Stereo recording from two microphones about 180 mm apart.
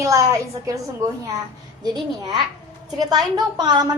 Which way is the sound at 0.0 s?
15° right (ahead or behind).